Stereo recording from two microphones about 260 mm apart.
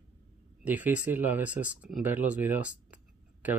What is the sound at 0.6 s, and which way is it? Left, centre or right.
Speech, centre.